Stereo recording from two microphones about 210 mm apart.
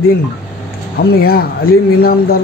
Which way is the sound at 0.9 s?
45° left (ahead or behind).